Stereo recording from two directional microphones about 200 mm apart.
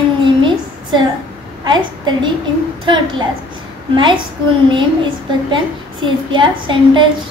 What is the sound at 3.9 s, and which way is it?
Speech, 25° right (ahead or behind).